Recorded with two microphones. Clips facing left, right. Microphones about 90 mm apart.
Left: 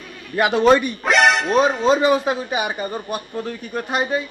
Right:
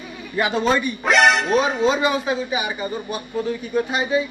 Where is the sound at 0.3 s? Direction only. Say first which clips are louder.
Left 5 dB; 65° left (ahead or behind).